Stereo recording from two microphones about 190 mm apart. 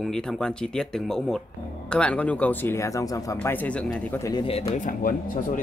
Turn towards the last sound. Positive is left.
turn(degrees=45)  # may be behind; listen again after turning